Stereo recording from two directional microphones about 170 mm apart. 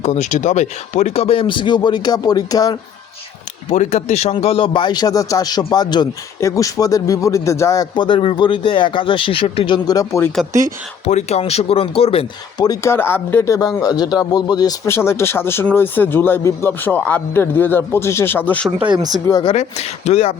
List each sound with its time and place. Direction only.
0.0 s speech: 45° left (ahead or behind); by 2.7 s 20° left (ahead or behind)
3.7 s a man's voice: 40° left (ahead or behind); by 10.2 s 20° left (ahead or behind)
11.0 s speech: 40° left (ahead or behind)
12.6 s speech: 20° left (ahead or behind)
19.3 s a man's voice: 30° left (ahead or behind)
19.5 s speech: 40° left (ahead or behind)